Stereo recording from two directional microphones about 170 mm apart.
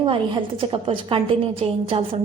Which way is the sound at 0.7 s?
30° right (ahead or behind).